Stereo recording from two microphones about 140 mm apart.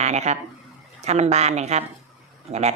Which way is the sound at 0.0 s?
55° right (ahead or behind).